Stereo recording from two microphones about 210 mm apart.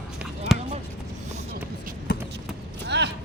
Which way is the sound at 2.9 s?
55° right (ahead or behind).